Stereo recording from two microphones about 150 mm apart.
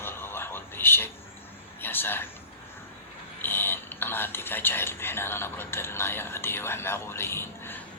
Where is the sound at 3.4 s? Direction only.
15° left (ahead or behind).